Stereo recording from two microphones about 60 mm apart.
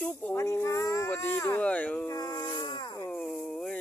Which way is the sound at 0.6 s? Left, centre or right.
Left.